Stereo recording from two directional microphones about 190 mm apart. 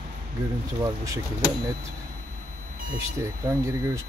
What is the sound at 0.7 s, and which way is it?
Speech, 20° right (ahead or behind).